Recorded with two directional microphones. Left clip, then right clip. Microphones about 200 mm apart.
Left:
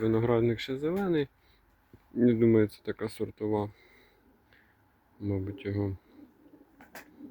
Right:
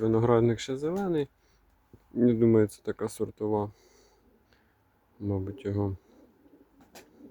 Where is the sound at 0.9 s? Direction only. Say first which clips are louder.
Left 1 dB; 5° right (ahead or behind).